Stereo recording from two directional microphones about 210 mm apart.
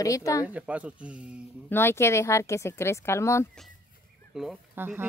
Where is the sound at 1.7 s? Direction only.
10° left (ahead or behind).